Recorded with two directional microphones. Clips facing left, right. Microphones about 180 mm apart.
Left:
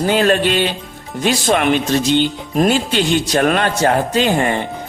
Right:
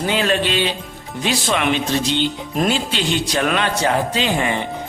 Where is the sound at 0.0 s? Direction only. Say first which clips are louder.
Left 5 dB; 45° left (ahead or behind).